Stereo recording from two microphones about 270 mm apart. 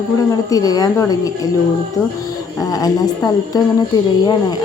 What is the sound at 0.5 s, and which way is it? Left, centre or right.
Speech, centre.